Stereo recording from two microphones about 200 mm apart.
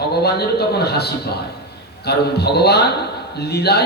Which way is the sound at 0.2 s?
55° left (ahead or behind).